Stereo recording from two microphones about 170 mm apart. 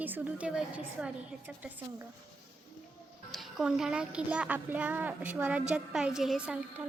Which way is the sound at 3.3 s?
Centre (ahead or behind).